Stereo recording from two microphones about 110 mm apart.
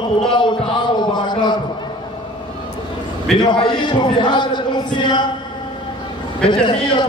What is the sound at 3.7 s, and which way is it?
Speech, 45° left (ahead or behind).